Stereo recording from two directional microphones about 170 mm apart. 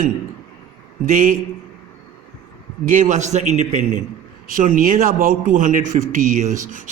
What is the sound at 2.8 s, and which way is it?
A man's voice, 50° right (ahead or behind).